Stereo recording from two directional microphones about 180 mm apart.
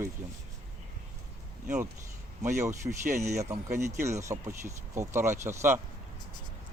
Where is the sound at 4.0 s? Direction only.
15° right (ahead or behind).